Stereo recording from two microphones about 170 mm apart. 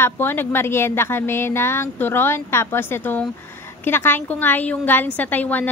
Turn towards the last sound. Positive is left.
turn(degrees=10)  # may be behind; listen again after turning